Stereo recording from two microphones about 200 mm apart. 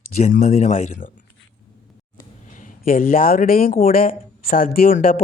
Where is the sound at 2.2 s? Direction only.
40° left (ahead or behind).